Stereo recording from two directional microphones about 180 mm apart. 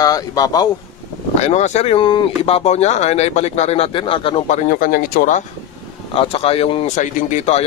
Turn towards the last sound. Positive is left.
turn(degrees=40)  # may be behind; listen again after turning